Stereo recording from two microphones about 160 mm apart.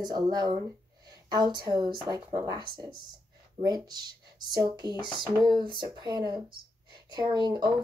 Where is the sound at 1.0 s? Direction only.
25° right (ahead or behind).